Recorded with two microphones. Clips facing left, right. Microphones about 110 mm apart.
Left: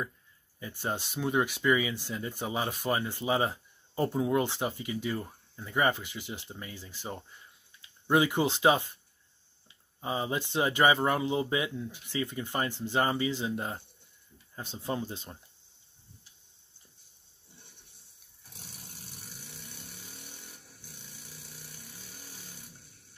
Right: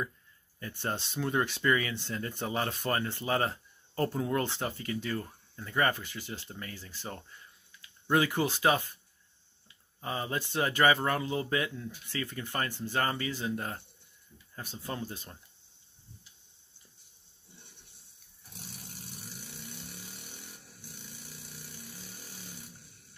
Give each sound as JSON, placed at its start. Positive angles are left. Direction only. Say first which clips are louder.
{"t": 0.6, "sound": "speech", "louder": "left 1 dB", "side_deg": 10}